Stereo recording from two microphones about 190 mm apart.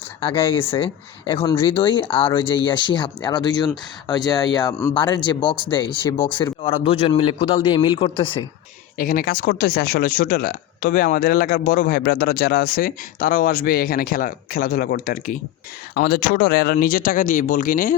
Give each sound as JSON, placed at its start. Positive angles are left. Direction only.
{"t": 0.2, "sound": "speech", "side_deg": 30}
{"t": 9.0, "sound": "speech", "side_deg": 50}